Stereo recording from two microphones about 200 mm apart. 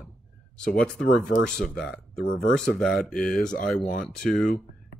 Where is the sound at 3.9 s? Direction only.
40° left (ahead or behind).